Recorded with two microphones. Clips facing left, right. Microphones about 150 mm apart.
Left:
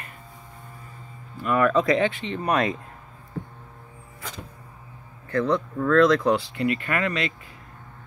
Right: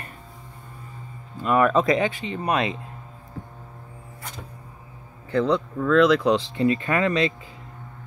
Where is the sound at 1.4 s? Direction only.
20° right (ahead or behind).